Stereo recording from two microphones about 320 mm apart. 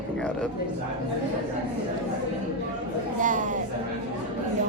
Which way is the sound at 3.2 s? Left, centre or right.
Right.